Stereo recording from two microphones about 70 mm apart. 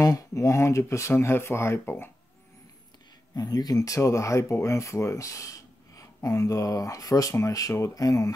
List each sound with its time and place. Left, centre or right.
0.3 s speech: left
3.3 s speech: left